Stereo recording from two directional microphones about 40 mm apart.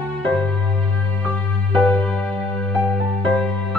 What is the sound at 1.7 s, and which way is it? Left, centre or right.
Music, left.